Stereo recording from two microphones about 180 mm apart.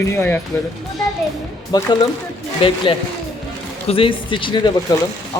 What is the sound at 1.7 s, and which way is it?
Speech, 20° left (ahead or behind).